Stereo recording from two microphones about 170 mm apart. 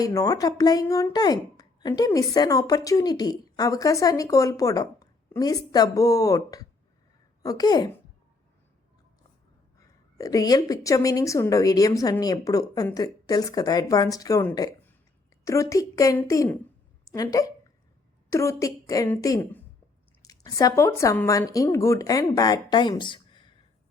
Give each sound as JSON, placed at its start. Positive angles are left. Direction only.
{"t": 0.0, "sound": "speech", "side_deg": 20}
{"t": 9.8, "sound": "a woman's voice", "side_deg": 20}